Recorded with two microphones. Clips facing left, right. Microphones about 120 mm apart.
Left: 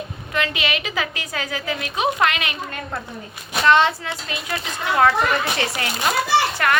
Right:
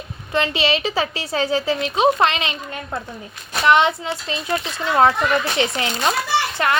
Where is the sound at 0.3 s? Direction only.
30° right (ahead or behind).